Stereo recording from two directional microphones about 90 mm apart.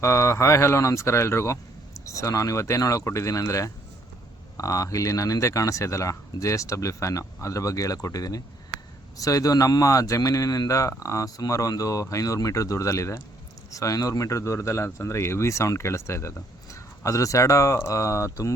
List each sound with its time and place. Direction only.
0.0 s speech: 30° left (ahead or behind)